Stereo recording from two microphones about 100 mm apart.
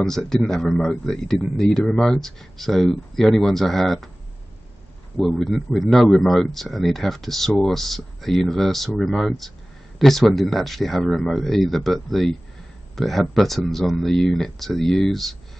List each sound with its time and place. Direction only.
0.0 s speech: 5° left (ahead or behind)
5.1 s speech: centre (ahead or behind)